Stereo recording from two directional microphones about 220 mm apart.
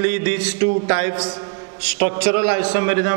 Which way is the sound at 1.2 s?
25° right (ahead or behind).